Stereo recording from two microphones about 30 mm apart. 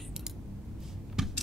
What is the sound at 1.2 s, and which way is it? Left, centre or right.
Typing, centre.